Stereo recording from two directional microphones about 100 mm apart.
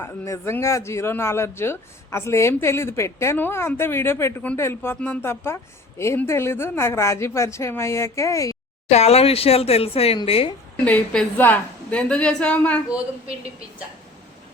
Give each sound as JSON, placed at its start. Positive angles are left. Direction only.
{"t": 0.0, "sound": "speech", "side_deg": 25}
{"t": 8.9, "sound": "speech", "side_deg": 90}
{"t": 10.8, "sound": "speech", "side_deg": 10}